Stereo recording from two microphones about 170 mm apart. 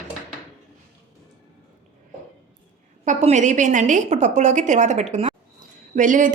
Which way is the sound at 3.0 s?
45° right (ahead or behind).